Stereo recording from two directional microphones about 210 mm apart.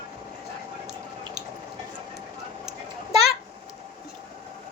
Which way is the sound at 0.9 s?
Centre (ahead or behind).